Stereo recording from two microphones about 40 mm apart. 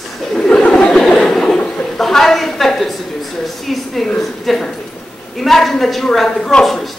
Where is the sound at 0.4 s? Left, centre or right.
Left.